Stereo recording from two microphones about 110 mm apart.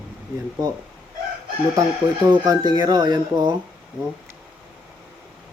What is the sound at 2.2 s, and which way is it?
Speech, 40° right (ahead or behind).